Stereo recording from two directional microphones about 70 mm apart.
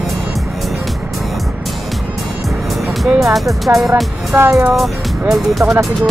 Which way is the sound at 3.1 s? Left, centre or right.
Centre.